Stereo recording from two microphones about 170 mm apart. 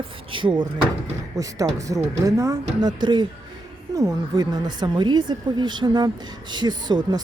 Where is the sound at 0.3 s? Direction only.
30° right (ahead or behind).